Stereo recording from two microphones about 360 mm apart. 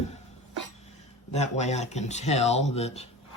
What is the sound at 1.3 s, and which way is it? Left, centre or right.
Speech, centre.